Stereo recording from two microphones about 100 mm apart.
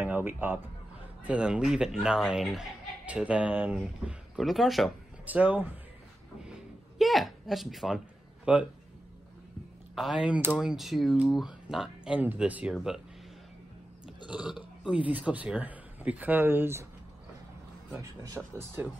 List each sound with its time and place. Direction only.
0.0 s speech: 20° right (ahead or behind); by 4.9 s centre (ahead or behind)
5.2 s speech: 15° right (ahead or behind)
6.4 s speech: 5° right (ahead or behind)
8.5 s speech: 10° right (ahead or behind)
9.9 s speech: centre (ahead or behind)
14.0 s burping: 10° right (ahead or behind)
15.0 s speech: 15° right (ahead or behind)
17.9 s speech: 35° right (ahead or behind)